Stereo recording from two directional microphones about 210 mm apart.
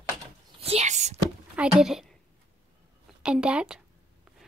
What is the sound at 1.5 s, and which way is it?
Speech, 5° right (ahead or behind).